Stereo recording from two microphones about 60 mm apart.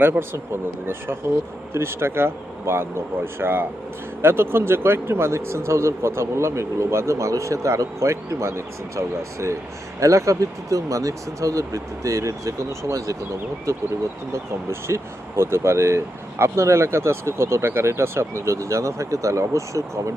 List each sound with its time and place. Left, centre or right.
0.0 s speech: right
14.7 s speech: right